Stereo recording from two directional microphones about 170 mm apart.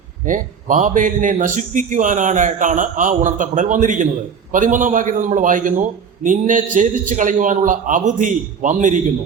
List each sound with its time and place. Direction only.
0.3 s a man's voice: 50° right (ahead or behind)